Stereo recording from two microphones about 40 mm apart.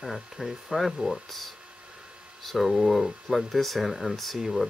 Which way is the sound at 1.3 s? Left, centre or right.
Centre.